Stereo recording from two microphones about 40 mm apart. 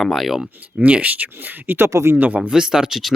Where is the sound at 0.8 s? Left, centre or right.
Right.